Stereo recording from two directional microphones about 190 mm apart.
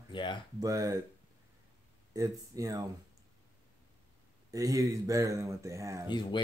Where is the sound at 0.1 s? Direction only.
25° left (ahead or behind).